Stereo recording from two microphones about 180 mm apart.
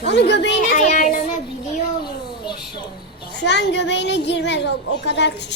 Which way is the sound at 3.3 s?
75° left (ahead or behind).